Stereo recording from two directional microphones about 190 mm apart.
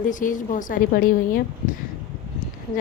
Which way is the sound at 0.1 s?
45° left (ahead or behind).